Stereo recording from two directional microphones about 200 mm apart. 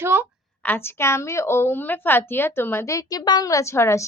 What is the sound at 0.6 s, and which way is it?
A woman's voice, 10° left (ahead or behind).